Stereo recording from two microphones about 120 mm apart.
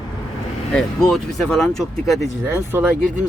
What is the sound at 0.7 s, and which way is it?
Speech, 5° left (ahead or behind).